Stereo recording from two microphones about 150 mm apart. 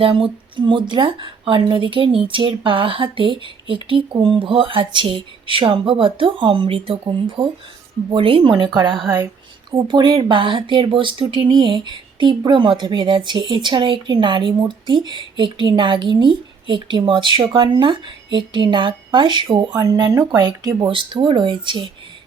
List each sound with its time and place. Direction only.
0.0 s speech: 35° right (ahead or behind)